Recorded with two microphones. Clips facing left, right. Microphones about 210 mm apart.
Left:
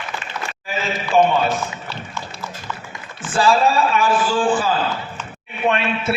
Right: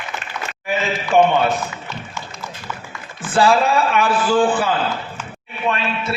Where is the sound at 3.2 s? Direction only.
60° right (ahead or behind).